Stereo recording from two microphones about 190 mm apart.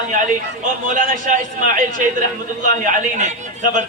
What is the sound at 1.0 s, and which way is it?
A man's voice, 45° right (ahead or behind).